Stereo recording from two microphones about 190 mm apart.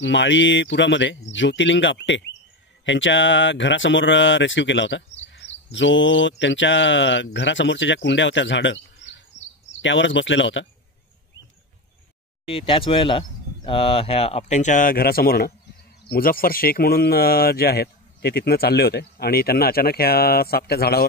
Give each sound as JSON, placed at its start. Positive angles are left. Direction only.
{"t": 0.0, "sound": "speech", "side_deg": 75}
{"t": 5.2, "sound": "a sound", "side_deg": 75}
{"t": 7.3, "sound": "speech", "side_deg": 75}
{"t": 12.4, "sound": "speech", "side_deg": 30}